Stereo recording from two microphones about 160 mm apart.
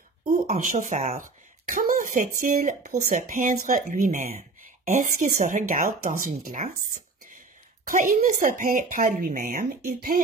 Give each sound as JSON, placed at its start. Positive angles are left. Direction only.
{"t": 0.3, "sound": "speech", "side_deg": -50}
{"t": 3.0, "sound": "a woman's voice", "side_deg": -60}